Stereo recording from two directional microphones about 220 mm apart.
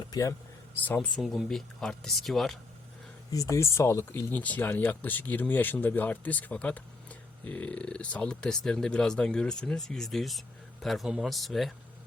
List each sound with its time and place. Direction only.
0.1 s speech: 15° left (ahead or behind)
3.2 s speech: 15° left (ahead or behind)